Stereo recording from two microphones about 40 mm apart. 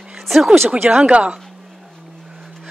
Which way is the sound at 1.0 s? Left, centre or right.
Right.